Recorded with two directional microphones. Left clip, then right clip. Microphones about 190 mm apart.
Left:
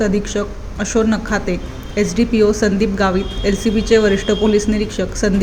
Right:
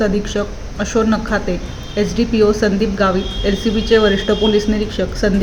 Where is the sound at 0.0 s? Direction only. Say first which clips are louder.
Right 1 dB; 15° left (ahead or behind).